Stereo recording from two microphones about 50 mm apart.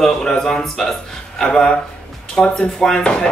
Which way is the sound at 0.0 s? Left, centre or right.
Centre.